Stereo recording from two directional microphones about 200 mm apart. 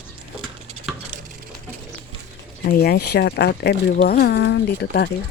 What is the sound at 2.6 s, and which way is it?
Speech, 50° left (ahead or behind).